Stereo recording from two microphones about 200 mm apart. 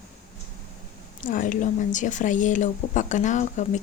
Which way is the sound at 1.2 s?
40° left (ahead or behind).